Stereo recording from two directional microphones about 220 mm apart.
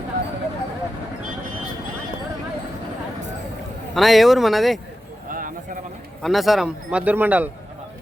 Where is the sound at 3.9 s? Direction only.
Centre (ahead or behind).